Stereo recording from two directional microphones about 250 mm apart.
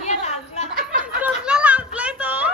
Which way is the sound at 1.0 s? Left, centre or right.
Centre.